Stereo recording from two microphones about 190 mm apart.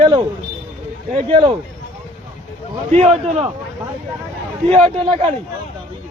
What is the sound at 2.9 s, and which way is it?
Speech, 35° right (ahead or behind).